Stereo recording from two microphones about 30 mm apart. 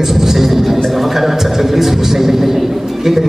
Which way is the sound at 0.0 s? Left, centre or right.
Centre.